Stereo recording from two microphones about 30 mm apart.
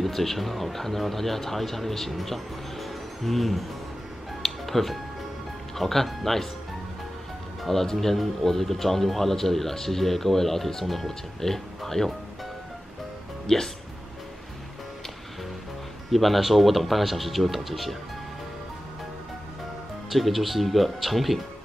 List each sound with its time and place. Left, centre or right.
0.0 s speech: centre
4.4 s music: centre
5.8 s speech: centre
7.6 s speech: centre
13.5 s speech: centre
16.1 s speech: centre
20.1 s speech: centre